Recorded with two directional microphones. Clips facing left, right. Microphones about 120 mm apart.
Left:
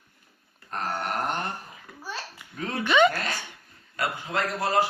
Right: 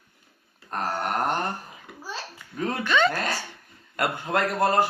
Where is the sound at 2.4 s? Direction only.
15° left (ahead or behind).